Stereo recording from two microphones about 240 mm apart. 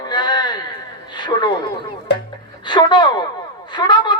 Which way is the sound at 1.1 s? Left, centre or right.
Centre.